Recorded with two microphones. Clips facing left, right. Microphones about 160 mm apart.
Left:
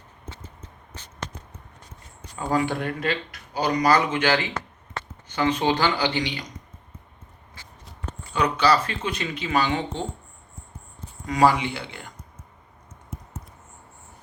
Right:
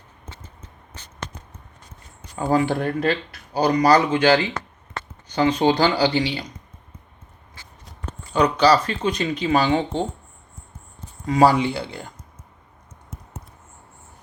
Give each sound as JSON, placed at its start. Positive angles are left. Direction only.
{"t": 2.5, "sound": "speech", "side_deg": -30}
{"t": 8.3, "sound": "speech", "side_deg": -35}
{"t": 11.3, "sound": "speech", "side_deg": -35}